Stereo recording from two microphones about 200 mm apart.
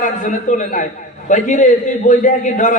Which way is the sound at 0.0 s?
40° left (ahead or behind).